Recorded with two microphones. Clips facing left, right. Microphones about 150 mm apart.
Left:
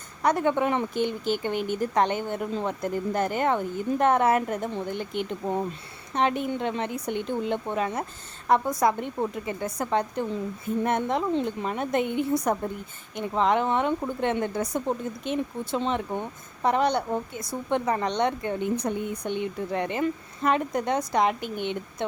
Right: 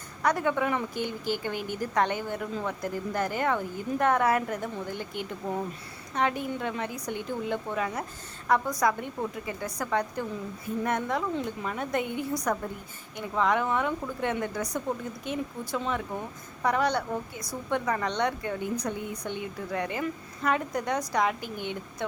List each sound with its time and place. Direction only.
0.2 s speech: 25° left (ahead or behind)